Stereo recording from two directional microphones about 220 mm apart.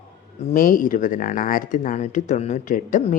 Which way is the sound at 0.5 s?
40° left (ahead or behind).